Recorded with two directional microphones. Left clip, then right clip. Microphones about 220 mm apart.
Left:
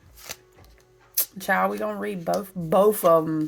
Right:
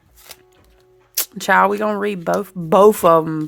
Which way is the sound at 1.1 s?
35° right (ahead or behind).